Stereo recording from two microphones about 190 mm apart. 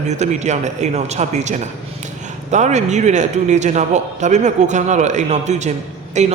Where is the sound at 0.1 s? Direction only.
35° right (ahead or behind).